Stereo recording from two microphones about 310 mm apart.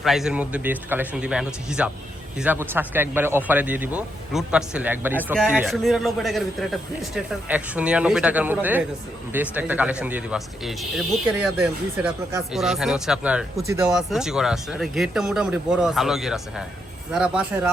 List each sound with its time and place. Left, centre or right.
0.0 s speech: centre